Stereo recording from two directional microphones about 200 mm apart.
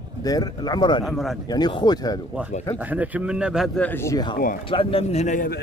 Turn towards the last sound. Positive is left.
turn(degrees=45)  # may be behind; listen again after turning